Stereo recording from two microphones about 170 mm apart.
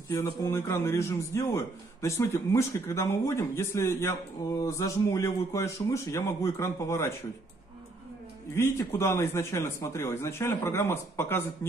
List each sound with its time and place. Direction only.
0.1 s a man's voice: 15° left (ahead or behind)
8.5 s a man's voice: 15° left (ahead or behind)